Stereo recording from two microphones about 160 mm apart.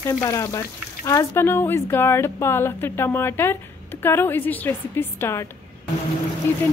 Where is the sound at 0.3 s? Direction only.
20° left (ahead or behind).